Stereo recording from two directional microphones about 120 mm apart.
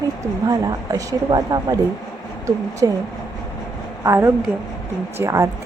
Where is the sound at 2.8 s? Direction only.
30° right (ahead or behind).